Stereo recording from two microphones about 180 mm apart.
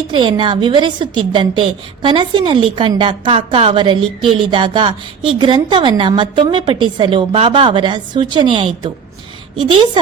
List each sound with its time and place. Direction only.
0.1 s a woman's voice: 25° right (ahead or behind)